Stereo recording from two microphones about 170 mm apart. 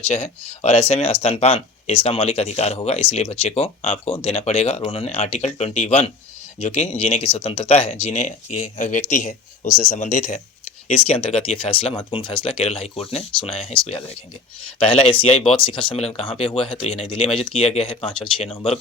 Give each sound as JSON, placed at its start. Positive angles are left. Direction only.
{"t": 0.1, "sound": "speech", "side_deg": 40}